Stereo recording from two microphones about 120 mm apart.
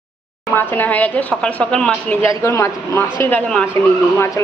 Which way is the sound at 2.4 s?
20° left (ahead or behind).